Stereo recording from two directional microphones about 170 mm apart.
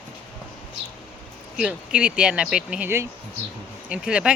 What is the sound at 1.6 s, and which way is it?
Speech, 5° right (ahead or behind).